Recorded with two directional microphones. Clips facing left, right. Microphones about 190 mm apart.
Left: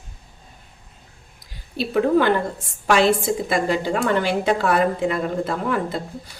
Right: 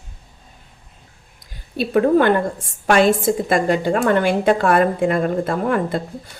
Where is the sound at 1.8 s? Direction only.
50° right (ahead or behind).